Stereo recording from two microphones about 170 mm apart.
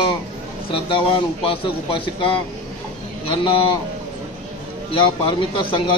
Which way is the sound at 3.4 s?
30° left (ahead or behind).